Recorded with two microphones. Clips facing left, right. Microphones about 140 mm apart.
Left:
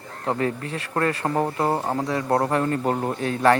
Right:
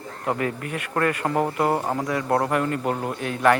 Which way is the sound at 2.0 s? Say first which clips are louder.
Left 1 dB; 25° left (ahead or behind).